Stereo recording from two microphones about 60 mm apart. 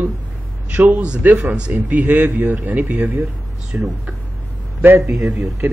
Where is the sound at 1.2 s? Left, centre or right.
Right.